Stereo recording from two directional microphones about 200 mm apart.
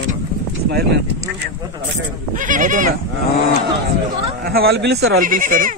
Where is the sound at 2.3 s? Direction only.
40° right (ahead or behind).